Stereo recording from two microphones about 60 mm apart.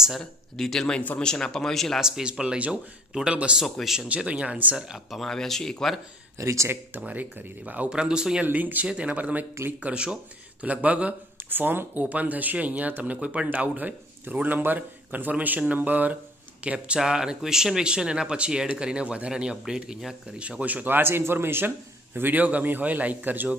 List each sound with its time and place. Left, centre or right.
0.2 s speech: centre
2.0 s speech: centre
3.6 s speech: centre
4.1 s speech: centre
4.9 s speech: centre
6.3 s speech: right
7.0 s speech: right
7.9 s speech: centre
8.5 s speech: right
11.3 s speech: right; by 20.4 s centre
20.4 s a man's voice: right